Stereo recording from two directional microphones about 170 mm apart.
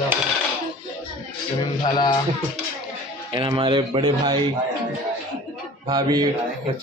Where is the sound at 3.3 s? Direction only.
30° right (ahead or behind).